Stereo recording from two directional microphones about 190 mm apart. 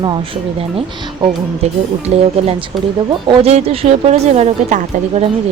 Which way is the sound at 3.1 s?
25° right (ahead or behind).